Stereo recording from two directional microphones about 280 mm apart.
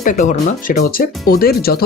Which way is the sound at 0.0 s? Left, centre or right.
Left.